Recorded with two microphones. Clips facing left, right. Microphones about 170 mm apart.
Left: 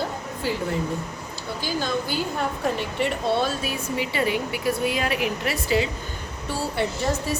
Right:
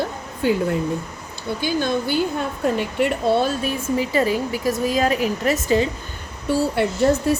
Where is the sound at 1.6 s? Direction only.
60° right (ahead or behind).